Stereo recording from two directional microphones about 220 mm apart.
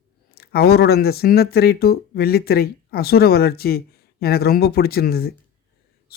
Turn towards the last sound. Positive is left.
turn(degrees=45)  # may be behind; listen again after turning